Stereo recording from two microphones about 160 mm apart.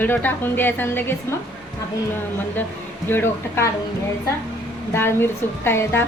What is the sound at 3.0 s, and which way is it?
Speech, 15° left (ahead or behind).